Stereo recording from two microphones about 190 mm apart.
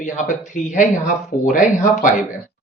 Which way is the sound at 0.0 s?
40° left (ahead or behind).